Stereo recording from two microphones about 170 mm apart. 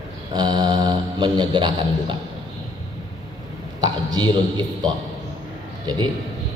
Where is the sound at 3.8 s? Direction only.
25° right (ahead or behind).